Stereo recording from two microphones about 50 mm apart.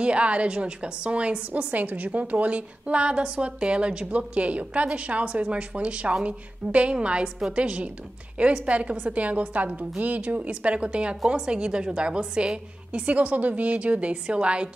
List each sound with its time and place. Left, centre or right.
0.0 s a woman's voice: right